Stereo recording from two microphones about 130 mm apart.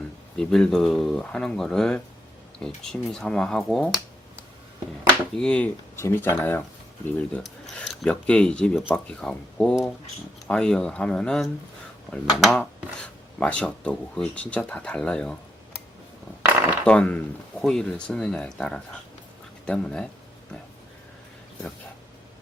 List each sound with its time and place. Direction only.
0.3 s speech: 5° left (ahead or behind)
5.0 s speech: 10° left (ahead or behind)
16.8 s speech: 10° left (ahead or behind)